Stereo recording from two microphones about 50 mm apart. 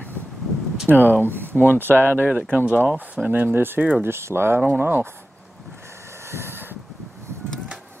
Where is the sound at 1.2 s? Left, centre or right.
Right.